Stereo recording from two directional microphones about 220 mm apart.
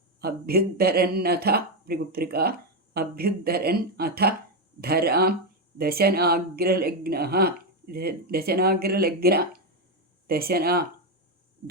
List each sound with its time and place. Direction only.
0.2 s speech: 45° right (ahead or behind)